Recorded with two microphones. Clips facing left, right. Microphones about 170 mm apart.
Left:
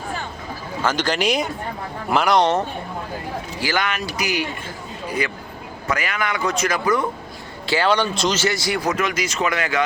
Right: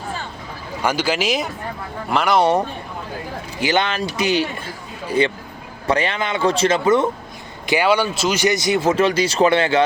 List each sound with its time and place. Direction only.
0.8 s speech: 10° right (ahead or behind)
3.6 s speech: 25° right (ahead or behind)
7.7 s speech: 10° right (ahead or behind); by 9.8 s 30° right (ahead or behind)